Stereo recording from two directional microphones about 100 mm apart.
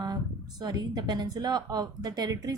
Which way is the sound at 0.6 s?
45° right (ahead or behind).